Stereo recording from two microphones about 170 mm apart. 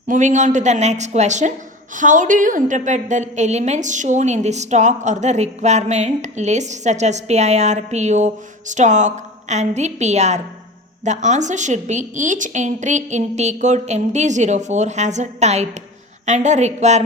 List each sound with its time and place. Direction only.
0.1 s a woman's voice: 45° right (ahead or behind)